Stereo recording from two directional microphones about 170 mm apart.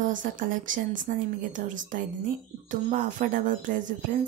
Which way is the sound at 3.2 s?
55° right (ahead or behind).